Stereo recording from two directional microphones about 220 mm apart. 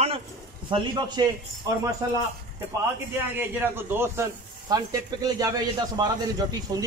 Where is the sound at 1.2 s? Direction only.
20° right (ahead or behind).